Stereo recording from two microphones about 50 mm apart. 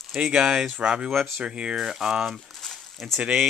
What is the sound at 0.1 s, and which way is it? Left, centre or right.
Speech, centre.